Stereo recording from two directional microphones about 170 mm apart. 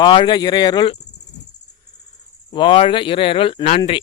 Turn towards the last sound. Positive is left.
turn(degrees=35)  # may be behind; listen again after turning